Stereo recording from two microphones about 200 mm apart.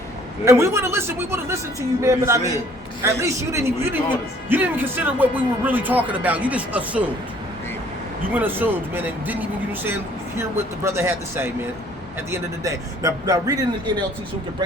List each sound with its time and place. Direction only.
0.4 s speech: 15° right (ahead or behind)
8.3 s speech: 10° right (ahead or behind)